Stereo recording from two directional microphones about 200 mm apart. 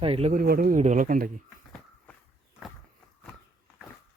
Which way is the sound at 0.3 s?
45° right (ahead or behind).